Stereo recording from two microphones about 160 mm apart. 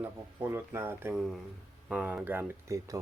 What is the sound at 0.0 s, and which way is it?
Speech, 15° right (ahead or behind).